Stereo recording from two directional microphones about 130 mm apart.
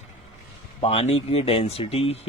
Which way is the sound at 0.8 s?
50° left (ahead or behind).